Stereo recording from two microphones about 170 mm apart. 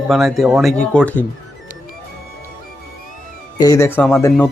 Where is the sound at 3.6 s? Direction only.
20° left (ahead or behind).